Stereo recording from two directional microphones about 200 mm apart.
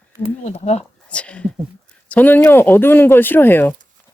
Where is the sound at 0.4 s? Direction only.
35° left (ahead or behind).